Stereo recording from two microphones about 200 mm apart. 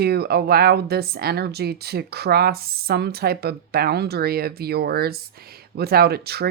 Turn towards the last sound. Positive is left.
turn(degrees=-50)  # may be behind; listen again after turning